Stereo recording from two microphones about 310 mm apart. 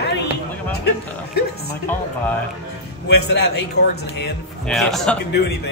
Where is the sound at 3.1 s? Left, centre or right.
Left.